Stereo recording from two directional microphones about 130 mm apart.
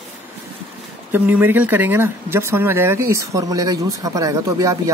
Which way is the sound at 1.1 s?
15° right (ahead or behind).